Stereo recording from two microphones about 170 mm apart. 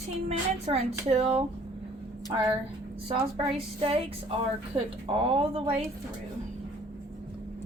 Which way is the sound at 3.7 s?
35° right (ahead or behind).